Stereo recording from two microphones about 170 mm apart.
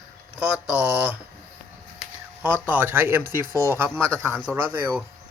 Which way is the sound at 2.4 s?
10° right (ahead or behind).